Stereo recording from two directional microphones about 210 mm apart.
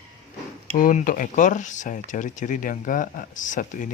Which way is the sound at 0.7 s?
40° left (ahead or behind).